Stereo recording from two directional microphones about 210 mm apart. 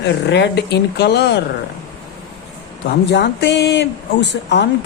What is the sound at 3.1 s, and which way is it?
Speech, 55° left (ahead or behind).